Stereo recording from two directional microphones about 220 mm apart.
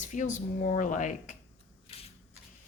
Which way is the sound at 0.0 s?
35° left (ahead or behind).